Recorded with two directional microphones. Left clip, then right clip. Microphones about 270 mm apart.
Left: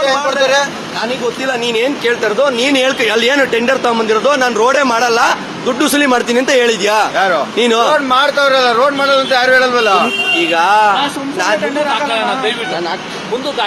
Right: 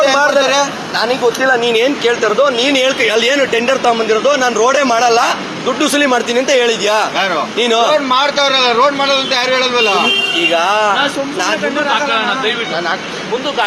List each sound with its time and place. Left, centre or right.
0.0 s speech: centre
2.4 s a man's voice: left